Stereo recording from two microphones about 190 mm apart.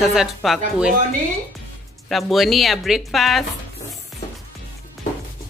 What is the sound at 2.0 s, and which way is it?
Speech, centre (ahead or behind).